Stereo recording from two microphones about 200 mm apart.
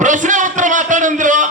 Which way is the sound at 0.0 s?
40° right (ahead or behind).